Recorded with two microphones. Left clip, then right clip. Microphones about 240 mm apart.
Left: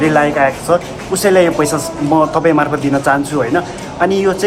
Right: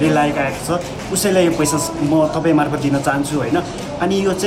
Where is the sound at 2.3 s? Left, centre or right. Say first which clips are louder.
Left 4 dB; left.